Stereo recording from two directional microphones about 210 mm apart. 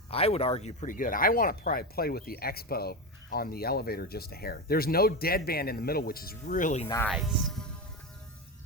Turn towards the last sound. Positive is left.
turn(degrees=0)  # may be behind; listen again after turning